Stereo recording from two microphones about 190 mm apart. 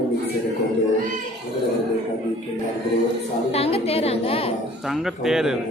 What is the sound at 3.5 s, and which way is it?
A woman's voice, 30° left (ahead or behind).